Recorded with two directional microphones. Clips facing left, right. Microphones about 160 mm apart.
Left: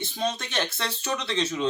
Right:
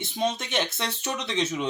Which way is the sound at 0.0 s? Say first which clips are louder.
Right 2 dB; 20° right (ahead or behind).